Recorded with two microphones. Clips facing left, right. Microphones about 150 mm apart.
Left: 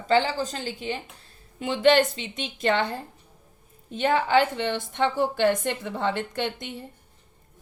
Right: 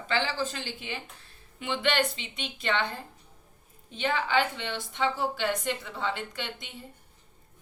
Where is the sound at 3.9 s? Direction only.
45° left (ahead or behind).